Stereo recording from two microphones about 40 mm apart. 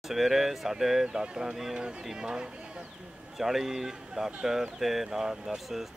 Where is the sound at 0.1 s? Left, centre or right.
Centre.